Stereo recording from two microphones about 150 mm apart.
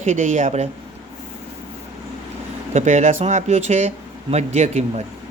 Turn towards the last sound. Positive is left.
turn(degrees=-50)  # may be behind; listen again after turning